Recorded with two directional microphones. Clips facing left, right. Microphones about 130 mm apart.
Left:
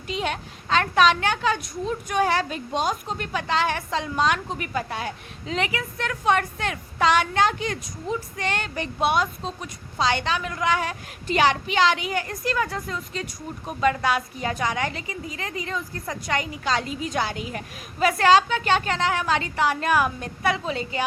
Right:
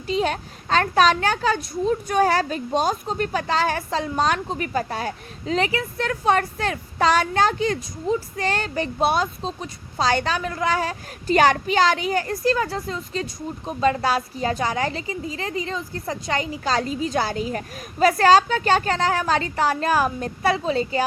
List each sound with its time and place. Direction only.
0.1 s a child's voice: 35° right (ahead or behind)